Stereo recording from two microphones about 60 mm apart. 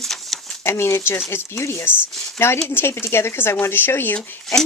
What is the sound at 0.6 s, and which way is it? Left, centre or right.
Speech, left.